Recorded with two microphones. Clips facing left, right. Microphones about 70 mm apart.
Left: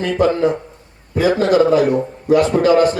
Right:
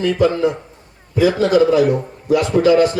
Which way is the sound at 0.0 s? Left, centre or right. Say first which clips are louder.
Even; left.